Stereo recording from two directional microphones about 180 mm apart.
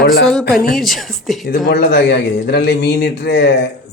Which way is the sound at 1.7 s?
65° left (ahead or behind).